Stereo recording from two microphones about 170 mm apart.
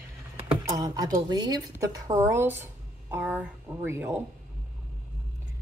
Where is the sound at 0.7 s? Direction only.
20° right (ahead or behind).